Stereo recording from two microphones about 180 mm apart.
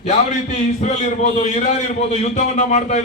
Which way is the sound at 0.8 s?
40° left (ahead or behind).